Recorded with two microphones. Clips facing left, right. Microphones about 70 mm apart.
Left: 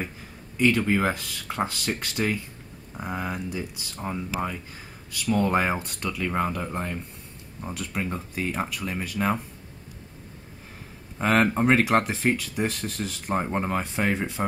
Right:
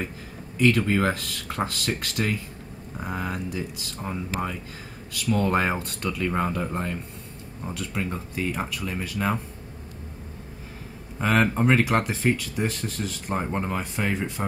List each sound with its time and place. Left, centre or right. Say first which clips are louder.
0.6 s speech: right 1 dB; centre
5.2 s speech: even; centre
7.7 s speech: even; centre
11.1 s speech: left 1 dB; centre